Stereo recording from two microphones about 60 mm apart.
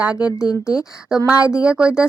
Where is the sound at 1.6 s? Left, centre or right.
Centre.